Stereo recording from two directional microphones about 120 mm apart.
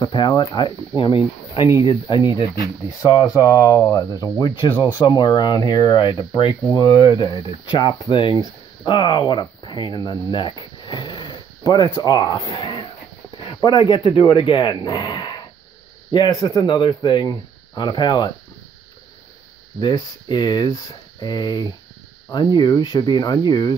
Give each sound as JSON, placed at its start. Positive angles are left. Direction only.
{"t": 0.0, "sound": "speech", "side_deg": 40}
{"t": 14.7, "sound": "speech", "side_deg": 35}
{"t": 19.8, "sound": "speech", "side_deg": 40}